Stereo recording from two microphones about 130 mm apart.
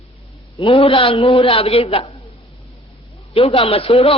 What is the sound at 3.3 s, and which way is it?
Speech, 45° left (ahead or behind).